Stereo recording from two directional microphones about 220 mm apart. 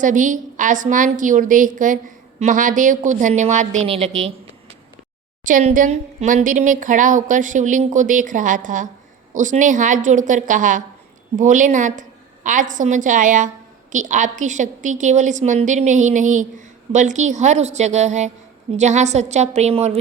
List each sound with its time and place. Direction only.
0.0 s a woman's voice: 35° right (ahead or behind)
5.5 s a woman's voice: 35° right (ahead or behind)